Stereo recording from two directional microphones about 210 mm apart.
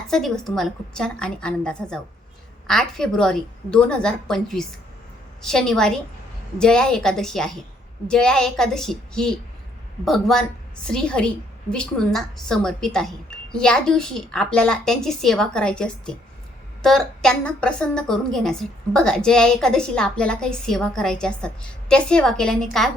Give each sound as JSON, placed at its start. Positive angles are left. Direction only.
{"t": 0.1, "sound": "speech", "side_deg": 0}